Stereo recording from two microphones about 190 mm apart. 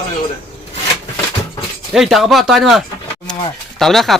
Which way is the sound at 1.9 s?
Centre (ahead or behind).